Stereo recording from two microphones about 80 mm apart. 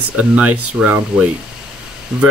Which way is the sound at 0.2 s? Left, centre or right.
Centre.